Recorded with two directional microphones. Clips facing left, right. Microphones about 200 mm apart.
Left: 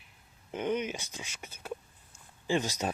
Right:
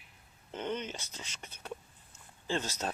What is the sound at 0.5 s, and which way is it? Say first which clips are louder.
Speech: left 5 dB; 10° left (ahead or behind).